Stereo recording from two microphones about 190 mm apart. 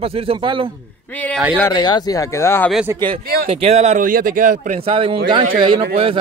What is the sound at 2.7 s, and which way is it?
Speech, 10° right (ahead or behind).